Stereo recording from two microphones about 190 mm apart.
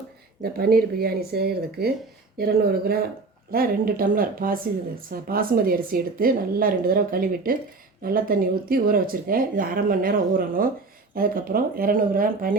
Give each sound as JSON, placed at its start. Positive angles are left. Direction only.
{"t": 0.4, "sound": "speech", "side_deg": -50}